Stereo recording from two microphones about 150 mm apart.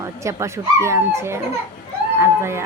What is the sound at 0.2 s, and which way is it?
A woman's voice, 20° right (ahead or behind).